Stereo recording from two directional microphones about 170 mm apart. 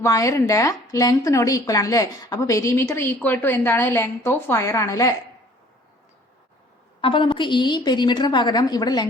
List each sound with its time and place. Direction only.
0.0 s a woman's voice: 20° left (ahead or behind)
7.0 s a woman's voice: 30° left (ahead or behind)